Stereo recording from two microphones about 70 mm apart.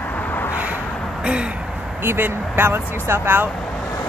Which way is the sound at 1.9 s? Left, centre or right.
Right.